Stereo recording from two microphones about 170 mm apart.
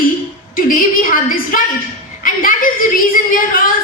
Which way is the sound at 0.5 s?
55° left (ahead or behind).